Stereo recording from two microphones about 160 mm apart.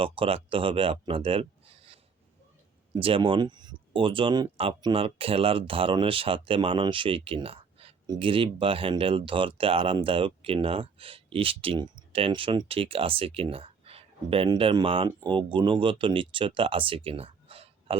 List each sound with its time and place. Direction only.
0.0 s speech: 35° right (ahead or behind)